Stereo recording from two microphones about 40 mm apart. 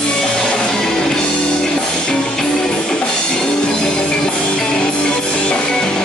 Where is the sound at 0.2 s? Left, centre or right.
Left.